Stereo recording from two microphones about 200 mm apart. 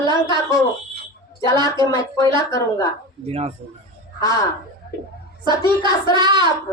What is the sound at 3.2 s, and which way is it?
Speech, 30° right (ahead or behind).